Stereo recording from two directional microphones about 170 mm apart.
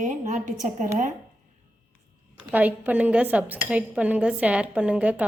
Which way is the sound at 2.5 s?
10° right (ahead or behind).